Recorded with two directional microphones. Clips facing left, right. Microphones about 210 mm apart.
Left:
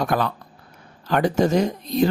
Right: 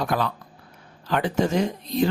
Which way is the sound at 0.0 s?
50° left (ahead or behind).